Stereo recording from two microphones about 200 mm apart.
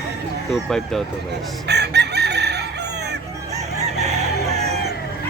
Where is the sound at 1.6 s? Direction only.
55° right (ahead or behind).